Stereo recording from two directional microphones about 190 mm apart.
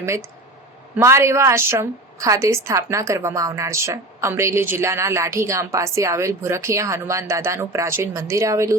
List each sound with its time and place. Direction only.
0.9 s a woman's voice: 15° right (ahead or behind)